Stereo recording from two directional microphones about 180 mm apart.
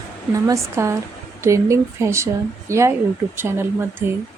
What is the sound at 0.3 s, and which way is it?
Speech, 15° right (ahead or behind).